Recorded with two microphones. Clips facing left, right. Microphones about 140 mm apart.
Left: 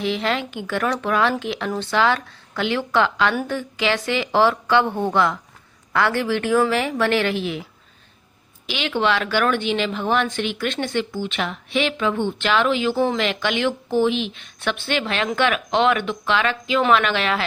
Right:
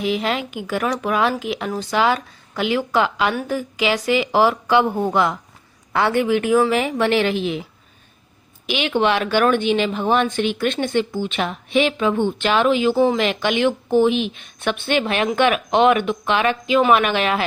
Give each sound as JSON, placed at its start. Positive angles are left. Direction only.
{"t": 0.0, "sound": "speech", "side_deg": -10}
{"t": 5.9, "sound": "a woman's voice", "side_deg": -20}